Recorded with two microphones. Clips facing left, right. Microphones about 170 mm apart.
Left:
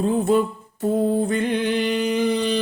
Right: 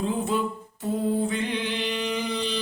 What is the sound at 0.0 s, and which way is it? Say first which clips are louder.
Music: left 7 dB; 50° left (ahead or behind).